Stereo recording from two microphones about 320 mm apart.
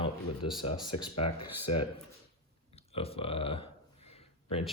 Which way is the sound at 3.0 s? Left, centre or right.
Centre.